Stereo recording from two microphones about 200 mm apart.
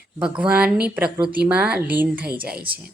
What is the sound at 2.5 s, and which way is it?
Speech, 50° right (ahead or behind).